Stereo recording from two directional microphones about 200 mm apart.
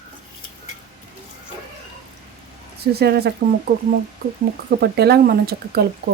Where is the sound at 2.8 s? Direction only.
50° right (ahead or behind).